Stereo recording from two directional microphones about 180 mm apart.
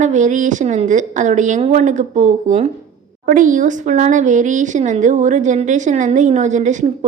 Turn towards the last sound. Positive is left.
turn(degrees=-40)  # may be behind; listen again after turning